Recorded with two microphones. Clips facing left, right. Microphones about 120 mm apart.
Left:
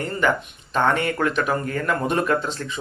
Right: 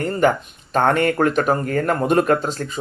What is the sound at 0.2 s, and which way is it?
Speech, 45° right (ahead or behind).